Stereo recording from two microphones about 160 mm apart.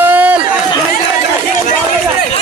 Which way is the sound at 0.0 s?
10° right (ahead or behind).